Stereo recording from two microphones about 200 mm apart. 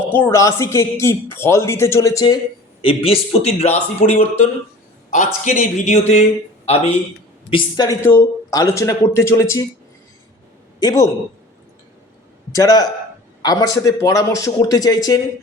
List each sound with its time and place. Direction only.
0.0 s speech: 10° left (ahead or behind)
2.8 s a man's voice: 30° left (ahead or behind)
7.5 s speech: 20° left (ahead or behind)
10.8 s a man's voice: 20° left (ahead or behind)
12.5 s speech: 20° left (ahead or behind)